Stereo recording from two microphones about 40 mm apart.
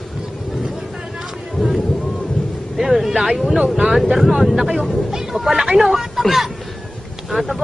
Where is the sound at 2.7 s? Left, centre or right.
Centre.